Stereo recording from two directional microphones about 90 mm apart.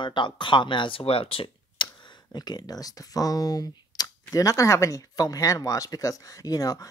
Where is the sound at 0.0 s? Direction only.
60° left (ahead or behind).